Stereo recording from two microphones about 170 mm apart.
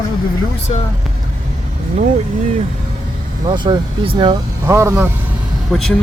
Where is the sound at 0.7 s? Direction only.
35° left (ahead or behind).